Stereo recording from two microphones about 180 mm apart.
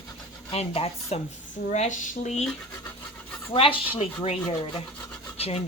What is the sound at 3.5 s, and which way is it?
Speech, 30° left (ahead or behind).